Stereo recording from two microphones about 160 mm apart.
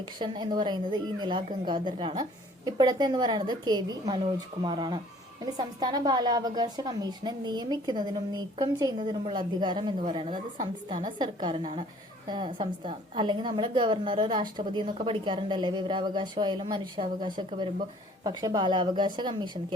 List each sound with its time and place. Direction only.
0.2 s a woman's voice: 30° right (ahead or behind)